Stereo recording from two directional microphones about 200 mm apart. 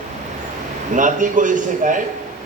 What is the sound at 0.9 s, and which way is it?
A man's voice, 40° right (ahead or behind).